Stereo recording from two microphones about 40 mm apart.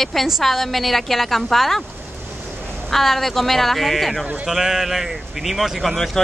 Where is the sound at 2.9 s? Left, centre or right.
Centre.